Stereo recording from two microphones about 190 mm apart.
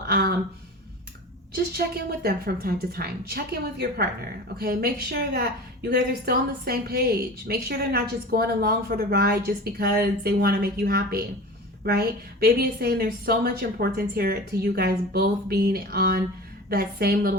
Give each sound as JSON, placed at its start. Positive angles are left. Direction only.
{"t": 0.0, "sound": "speech", "side_deg": -55}
{"t": 1.5, "sound": "a woman's voice", "side_deg": -55}